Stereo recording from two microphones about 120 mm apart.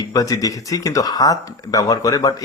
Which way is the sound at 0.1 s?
30° left (ahead or behind).